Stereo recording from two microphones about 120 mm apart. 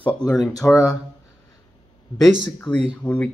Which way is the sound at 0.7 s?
25° left (ahead or behind).